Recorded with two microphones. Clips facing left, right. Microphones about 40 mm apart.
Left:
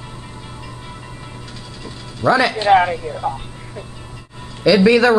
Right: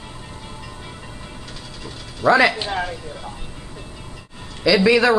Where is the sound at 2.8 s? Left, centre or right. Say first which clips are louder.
Left 10 dB; left.